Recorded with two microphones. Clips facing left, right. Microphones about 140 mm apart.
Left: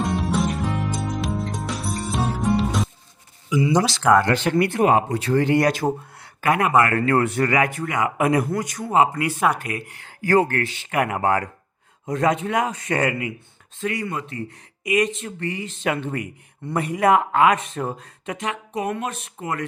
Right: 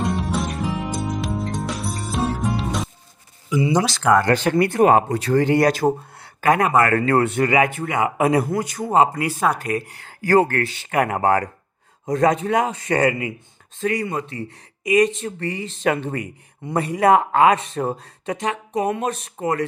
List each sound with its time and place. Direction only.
0.0 s music: centre (ahead or behind)
4.3 s speech: 40° right (ahead or behind)
7.3 s speech: 20° right (ahead or behind)
13.7 s speech: 40° right (ahead or behind)